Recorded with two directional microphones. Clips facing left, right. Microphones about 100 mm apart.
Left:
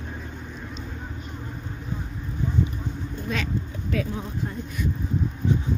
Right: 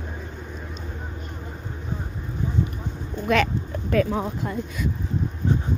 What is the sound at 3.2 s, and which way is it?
Vehicle, 70° right (ahead or behind).